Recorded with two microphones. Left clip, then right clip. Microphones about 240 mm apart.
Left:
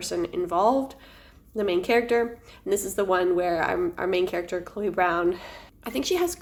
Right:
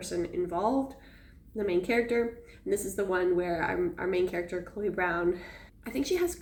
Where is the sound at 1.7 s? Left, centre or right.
Left.